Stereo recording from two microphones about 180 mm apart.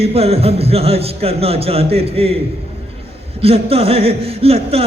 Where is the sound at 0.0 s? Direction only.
35° right (ahead or behind).